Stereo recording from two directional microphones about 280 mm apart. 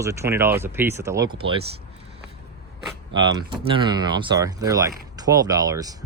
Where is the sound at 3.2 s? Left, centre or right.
Centre.